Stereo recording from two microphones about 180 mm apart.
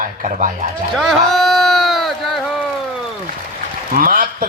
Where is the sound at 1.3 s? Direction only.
Centre (ahead or behind).